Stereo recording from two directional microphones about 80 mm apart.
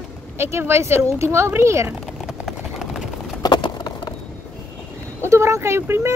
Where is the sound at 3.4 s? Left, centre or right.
Left.